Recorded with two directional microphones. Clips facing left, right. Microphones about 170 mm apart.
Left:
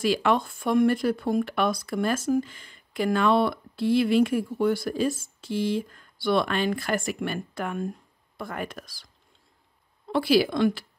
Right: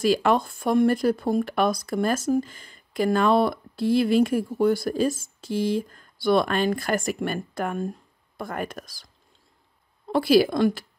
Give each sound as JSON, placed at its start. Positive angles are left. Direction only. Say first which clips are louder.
{"t": 0.0, "sound": "speech", "louder": "right 2 dB", "side_deg": -40}
{"t": 10.0, "sound": "speech", "louder": "right 3 dB", "side_deg": -45}